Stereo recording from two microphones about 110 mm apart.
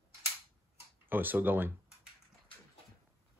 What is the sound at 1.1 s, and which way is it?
Speech, 15° right (ahead or behind).